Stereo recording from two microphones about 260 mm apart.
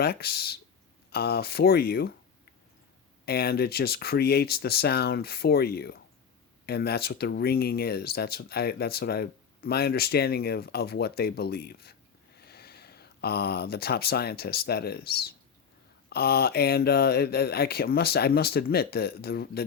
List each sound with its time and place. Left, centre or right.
0.0 s speech: left
3.2 s speech: left